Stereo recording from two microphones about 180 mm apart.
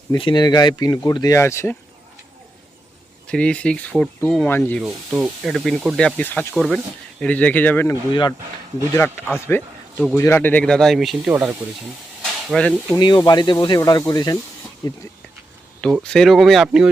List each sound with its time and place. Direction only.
0.1 s speech: 25° left (ahead or behind)
3.2 s speech: 5° left (ahead or behind)
4.8 s speech: 5° right (ahead or behind)
8.1 s speech: 25° left (ahead or behind)
9.3 s speech: 10° left (ahead or behind)
13.0 s speech: 25° left (ahead or behind)
15.8 s speech: 5° left (ahead or behind)